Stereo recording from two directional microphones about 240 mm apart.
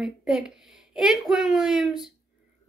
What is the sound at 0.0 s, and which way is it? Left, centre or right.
A woman's voice, centre.